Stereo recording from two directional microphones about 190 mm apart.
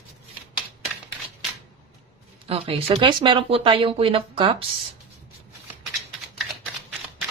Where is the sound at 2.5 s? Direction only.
30° right (ahead or behind).